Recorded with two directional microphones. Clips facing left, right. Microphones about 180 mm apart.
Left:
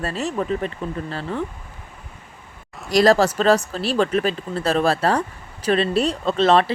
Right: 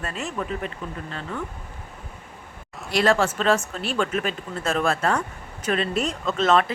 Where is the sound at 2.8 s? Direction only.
40° left (ahead or behind).